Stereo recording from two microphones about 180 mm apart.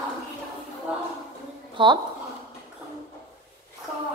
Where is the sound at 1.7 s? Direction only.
25° right (ahead or behind).